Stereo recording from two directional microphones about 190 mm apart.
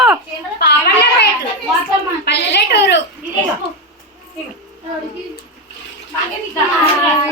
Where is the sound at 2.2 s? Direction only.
65° left (ahead or behind).